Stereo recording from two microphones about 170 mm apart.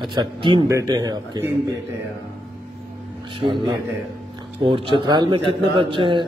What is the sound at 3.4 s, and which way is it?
Speech, 30° right (ahead or behind).